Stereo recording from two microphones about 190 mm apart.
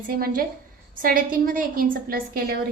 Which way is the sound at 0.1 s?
50° right (ahead or behind).